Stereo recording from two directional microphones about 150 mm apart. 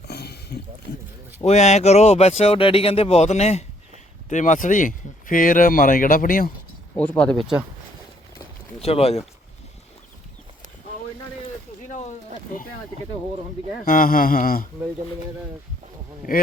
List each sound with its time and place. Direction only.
0.1 s a sound: 90° left
1.5 s speech: 50° left (ahead or behind); by 6.5 s 70° left (ahead or behind)
6.9 s speech: 10° left (ahead or behind)
8.8 s speech: 40° left (ahead or behind)
11.9 s a sound: 50° left (ahead or behind)
13.8 s speech: 70° left (ahead or behind)